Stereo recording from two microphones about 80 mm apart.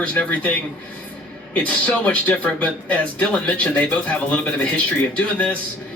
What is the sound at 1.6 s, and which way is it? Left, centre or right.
Speech, centre.